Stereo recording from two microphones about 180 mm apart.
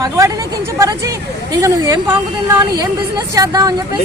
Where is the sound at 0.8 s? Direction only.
15° right (ahead or behind).